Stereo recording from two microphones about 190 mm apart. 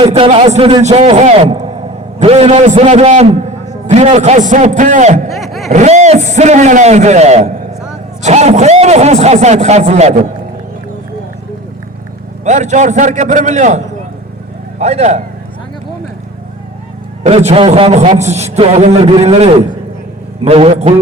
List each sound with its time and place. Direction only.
0.0 s a man's voice: 30° right (ahead or behind)
5.3 s vehicle: centre (ahead or behind)
5.7 s a man's voice: 40° right (ahead or behind)
12.5 s a man's voice: 40° right (ahead or behind)
17.2 s a man's voice: 35° right (ahead or behind)